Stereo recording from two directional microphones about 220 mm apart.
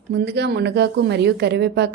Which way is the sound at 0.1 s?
50° right (ahead or behind).